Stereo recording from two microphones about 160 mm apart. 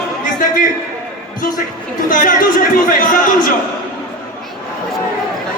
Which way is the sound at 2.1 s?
55° left (ahead or behind).